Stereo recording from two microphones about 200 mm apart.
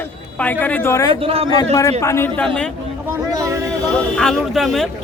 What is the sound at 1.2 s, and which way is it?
Speech, 30° right (ahead or behind).